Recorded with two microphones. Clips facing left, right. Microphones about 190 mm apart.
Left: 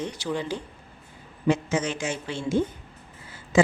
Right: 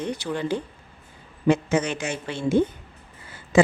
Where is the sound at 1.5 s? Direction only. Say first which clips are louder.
Right 3 dB; 60° right (ahead or behind).